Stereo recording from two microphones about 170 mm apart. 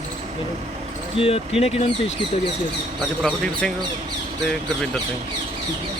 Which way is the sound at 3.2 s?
5° left (ahead or behind).